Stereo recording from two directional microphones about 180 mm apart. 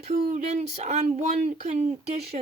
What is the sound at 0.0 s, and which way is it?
A woman's voice, 40° right (ahead or behind).